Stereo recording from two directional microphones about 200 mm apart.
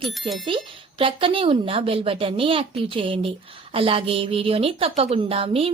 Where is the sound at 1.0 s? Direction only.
25° right (ahead or behind).